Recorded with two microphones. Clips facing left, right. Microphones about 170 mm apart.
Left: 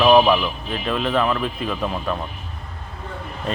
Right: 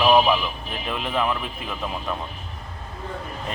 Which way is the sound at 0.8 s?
15° right (ahead or behind).